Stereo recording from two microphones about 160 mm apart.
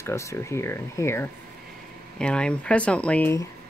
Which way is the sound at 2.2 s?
5° left (ahead or behind).